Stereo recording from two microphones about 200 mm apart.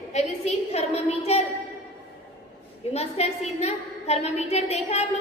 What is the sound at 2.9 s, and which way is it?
A woman's voice, 30° left (ahead or behind).